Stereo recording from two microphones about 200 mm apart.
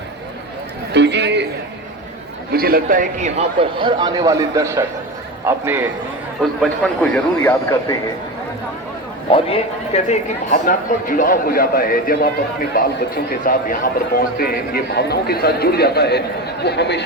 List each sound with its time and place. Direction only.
0.9 s a sound: 60° right (ahead or behind)
2.5 s a man's voice: 50° right (ahead or behind); by 5.8 s 10° right (ahead or behind)
6.6 s a man's voice: 5° left (ahead or behind)
9.3 s speech: 30° left (ahead or behind); by 17.0 s 55° left (ahead or behind)